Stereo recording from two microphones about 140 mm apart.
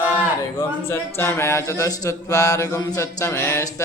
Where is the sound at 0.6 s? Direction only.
20° left (ahead or behind).